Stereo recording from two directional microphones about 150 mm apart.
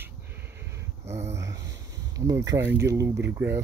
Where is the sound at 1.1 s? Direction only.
45° right (ahead or behind).